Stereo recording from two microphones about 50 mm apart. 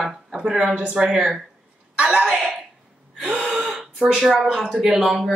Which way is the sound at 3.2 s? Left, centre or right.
Right.